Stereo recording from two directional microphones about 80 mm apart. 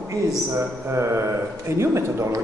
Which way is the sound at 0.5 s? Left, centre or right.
Right.